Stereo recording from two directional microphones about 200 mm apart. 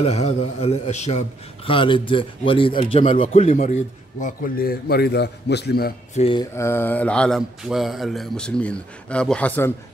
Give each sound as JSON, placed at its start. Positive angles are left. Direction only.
{"t": 0.0, "sound": "a man's voice", "side_deg": 35}
{"t": 4.2, "sound": "a man's voice", "side_deg": 45}
{"t": 6.1, "sound": "speech", "side_deg": 25}